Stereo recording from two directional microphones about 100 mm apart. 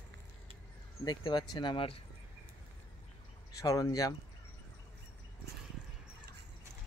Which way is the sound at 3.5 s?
35° left (ahead or behind).